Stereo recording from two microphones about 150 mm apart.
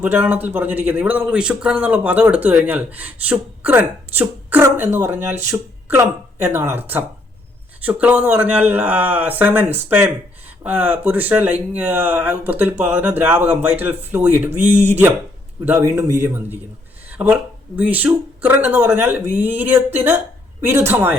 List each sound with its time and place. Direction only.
0.0 s speech: 10° right (ahead or behind)
17.1 s a sound: 10° right (ahead or behind)
17.7 s speech: 10° right (ahead or behind)